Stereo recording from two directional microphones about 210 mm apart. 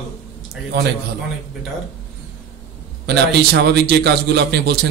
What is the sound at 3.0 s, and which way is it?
Speech, 50° right (ahead or behind).